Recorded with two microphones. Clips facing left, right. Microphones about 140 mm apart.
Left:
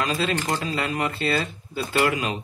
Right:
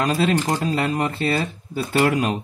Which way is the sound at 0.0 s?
45° right (ahead or behind).